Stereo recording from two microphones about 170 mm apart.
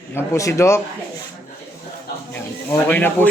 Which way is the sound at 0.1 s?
15° left (ahead or behind).